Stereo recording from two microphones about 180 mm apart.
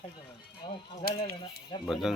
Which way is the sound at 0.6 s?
25° left (ahead or behind).